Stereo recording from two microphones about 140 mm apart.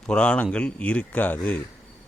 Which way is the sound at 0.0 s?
5° left (ahead or behind).